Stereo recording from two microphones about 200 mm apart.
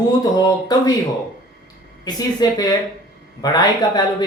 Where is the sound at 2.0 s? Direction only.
20° left (ahead or behind).